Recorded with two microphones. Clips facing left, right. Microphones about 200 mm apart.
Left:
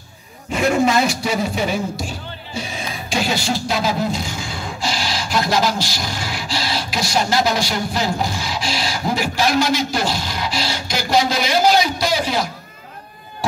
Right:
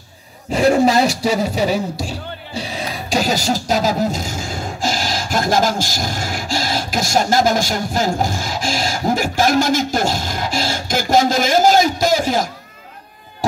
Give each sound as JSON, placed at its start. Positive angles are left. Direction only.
{"t": 0.5, "sound": "speech", "side_deg": -35}